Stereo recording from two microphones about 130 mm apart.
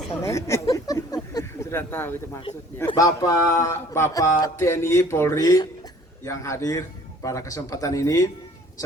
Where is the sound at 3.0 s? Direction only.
25° left (ahead or behind).